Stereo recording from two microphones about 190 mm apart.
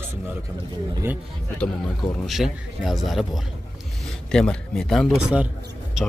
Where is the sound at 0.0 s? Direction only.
10° right (ahead or behind).